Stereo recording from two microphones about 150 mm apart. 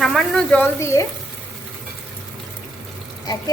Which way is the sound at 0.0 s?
Centre (ahead or behind).